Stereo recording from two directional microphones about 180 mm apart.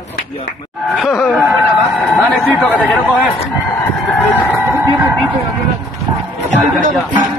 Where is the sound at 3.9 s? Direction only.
10° left (ahead or behind).